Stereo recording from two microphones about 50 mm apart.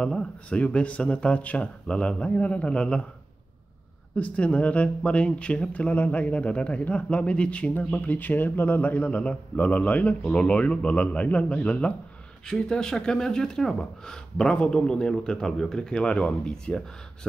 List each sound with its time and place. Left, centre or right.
0.0 s speech: left
4.2 s speech: left
7.9 s a man's voice: left
12.5 s a man's voice: centre